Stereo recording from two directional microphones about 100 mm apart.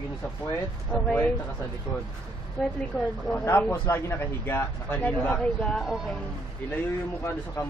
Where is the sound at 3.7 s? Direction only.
20° left (ahead or behind); by 6.0 s 5° left (ahead or behind).